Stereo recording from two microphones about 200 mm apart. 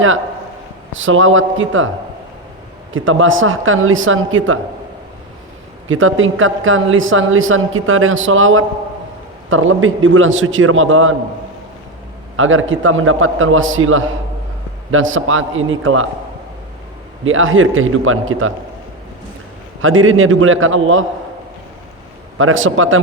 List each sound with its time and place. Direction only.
0.9 s a man's voice: 80° right
2.9 s a woman's voice: 80° right
5.9 s a woman's voice: 80° right
12.4 s a man's voice: 80° right
17.2 s a man's voice: 85° right
19.8 s a woman's voice: 85° right
22.4 s a woman's voice: 85° right